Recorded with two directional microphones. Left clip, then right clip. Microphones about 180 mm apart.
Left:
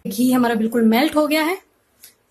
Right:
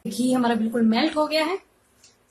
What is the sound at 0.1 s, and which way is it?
A woman's voice, 55° left (ahead or behind).